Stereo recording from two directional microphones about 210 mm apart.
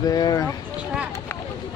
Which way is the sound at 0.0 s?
20° left (ahead or behind).